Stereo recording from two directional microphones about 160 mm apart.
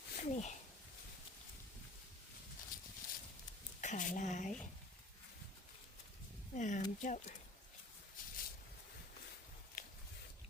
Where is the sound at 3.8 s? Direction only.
50° left (ahead or behind).